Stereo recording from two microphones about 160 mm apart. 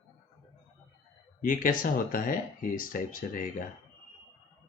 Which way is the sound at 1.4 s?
60° left (ahead or behind).